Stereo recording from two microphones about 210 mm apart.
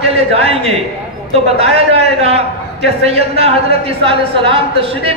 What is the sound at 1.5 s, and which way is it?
A woman's voice, 30° right (ahead or behind).